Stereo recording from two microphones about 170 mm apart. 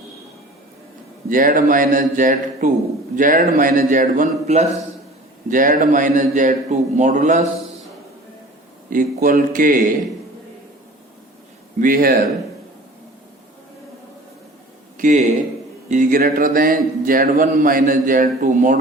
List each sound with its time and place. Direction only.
1.3 s a man's voice: 55° right (ahead or behind)
8.9 s a man's voice: 55° right (ahead or behind)
11.8 s speech: 60° right (ahead or behind)
14.9 s a man's voice: 50° right (ahead or behind)